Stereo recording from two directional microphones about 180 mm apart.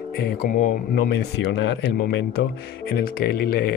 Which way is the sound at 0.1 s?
60° left (ahead or behind).